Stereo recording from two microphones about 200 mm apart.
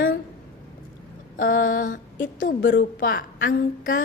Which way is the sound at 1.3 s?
45° left (ahead or behind).